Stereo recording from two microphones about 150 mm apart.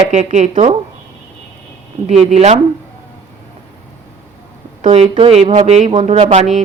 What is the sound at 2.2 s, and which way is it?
Speech, 45° right (ahead or behind).